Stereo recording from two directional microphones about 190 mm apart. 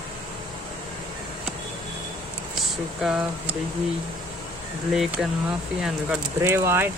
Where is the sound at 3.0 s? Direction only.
5° right (ahead or behind).